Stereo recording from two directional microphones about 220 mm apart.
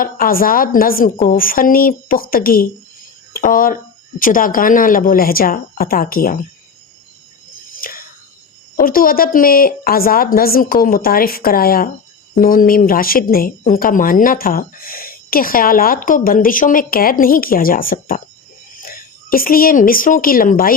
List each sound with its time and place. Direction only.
0.0 s speech: 40° left (ahead or behind)
7.8 s whispering: 40° left (ahead or behind)
8.7 s speech: 40° left (ahead or behind)